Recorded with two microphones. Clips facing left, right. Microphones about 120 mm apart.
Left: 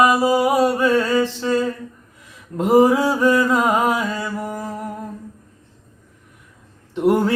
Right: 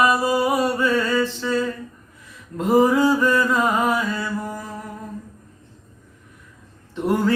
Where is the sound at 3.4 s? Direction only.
20° left (ahead or behind).